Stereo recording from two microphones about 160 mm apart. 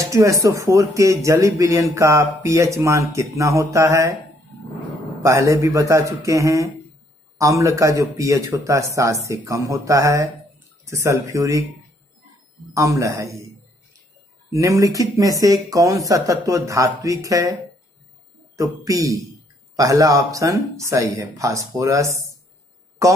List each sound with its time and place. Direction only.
0.0 s speech: 20° right (ahead or behind)
5.2 s speech: 20° right (ahead or behind)
12.7 s speech: 20° right (ahead or behind)
14.5 s speech: 20° right (ahead or behind)
18.6 s speech: 20° right (ahead or behind)